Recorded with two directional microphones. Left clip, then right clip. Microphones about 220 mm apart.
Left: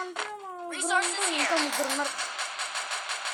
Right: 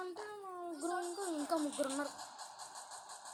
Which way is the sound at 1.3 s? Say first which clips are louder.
Left 14 dB; 40° left (ahead or behind).